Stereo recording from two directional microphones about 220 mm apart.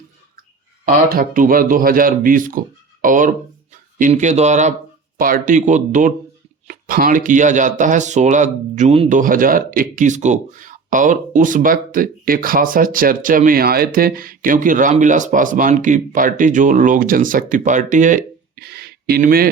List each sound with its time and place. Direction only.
0.9 s speech: 40° right (ahead or behind)